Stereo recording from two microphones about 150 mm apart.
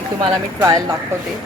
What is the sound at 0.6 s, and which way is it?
Speech, 20° right (ahead or behind).